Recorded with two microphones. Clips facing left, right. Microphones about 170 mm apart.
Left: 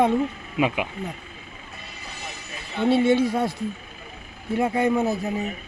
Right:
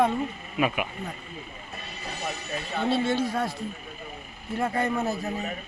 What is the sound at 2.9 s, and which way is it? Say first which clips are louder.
Speech: left 7 dB; 15° left (ahead or behind).